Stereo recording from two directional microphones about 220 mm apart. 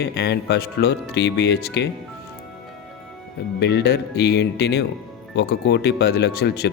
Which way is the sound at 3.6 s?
50° left (ahead or behind).